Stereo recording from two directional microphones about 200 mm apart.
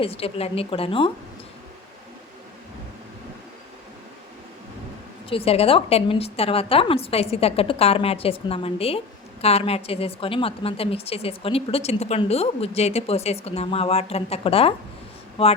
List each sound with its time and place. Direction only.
0.0 s a woman's voice: 30° left (ahead or behind)
5.3 s a woman's voice: 30° left (ahead or behind)